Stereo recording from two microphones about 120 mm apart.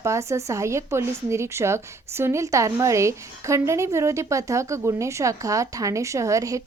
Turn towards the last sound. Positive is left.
turn(degrees=-25)  # may be behind; listen again after turning